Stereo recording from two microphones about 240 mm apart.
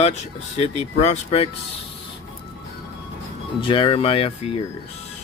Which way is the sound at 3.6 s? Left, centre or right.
Left.